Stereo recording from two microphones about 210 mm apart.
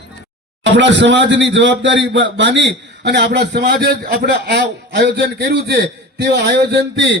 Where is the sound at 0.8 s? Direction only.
60° right (ahead or behind).